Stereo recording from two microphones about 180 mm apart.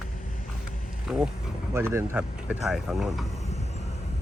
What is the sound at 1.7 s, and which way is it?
Speech, 15° right (ahead or behind).